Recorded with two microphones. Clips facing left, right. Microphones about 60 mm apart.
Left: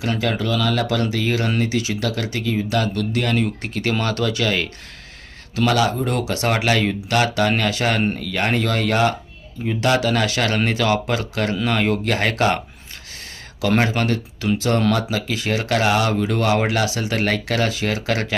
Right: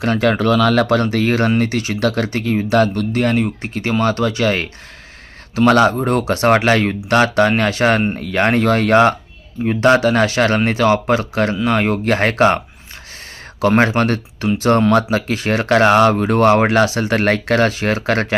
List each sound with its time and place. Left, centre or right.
0.0 s speech: right
13.6 s speech: right